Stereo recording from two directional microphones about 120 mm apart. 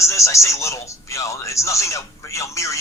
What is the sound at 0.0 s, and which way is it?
Speech, 25° left (ahead or behind).